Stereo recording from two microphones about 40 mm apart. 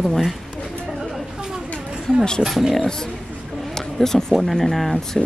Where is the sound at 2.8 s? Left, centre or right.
Centre.